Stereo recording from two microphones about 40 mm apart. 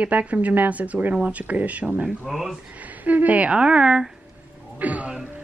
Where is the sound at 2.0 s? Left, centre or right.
Centre.